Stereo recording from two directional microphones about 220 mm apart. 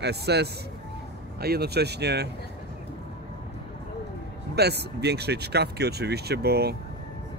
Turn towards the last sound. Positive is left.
turn(degrees=-45)  # may be behind; listen again after turning